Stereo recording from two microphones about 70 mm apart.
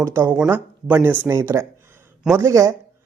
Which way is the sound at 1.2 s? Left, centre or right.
Right.